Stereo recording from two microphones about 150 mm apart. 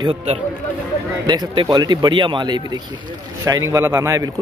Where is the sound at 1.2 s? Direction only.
30° right (ahead or behind).